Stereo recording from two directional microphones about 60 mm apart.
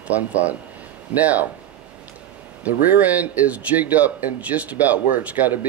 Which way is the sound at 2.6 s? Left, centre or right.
Right.